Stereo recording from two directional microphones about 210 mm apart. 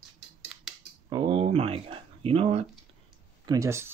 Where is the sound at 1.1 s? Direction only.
20° right (ahead or behind).